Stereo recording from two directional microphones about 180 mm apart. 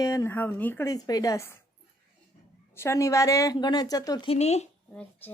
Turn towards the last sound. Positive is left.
turn(degrees=35)  # may be behind; listen again after turning